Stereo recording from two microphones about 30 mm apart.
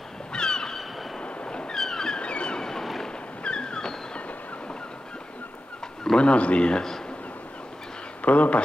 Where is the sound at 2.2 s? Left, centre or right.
Left.